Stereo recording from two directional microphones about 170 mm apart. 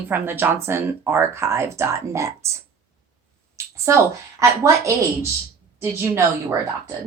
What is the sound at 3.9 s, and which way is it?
Speech, 15° right (ahead or behind).